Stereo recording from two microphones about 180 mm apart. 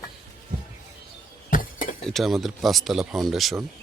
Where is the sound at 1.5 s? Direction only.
50° left (ahead or behind).